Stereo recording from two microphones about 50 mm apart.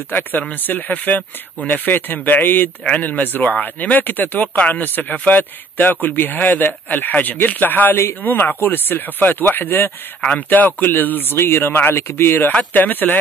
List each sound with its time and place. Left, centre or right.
0.1 s a man's voice: left
12.7 s speech: left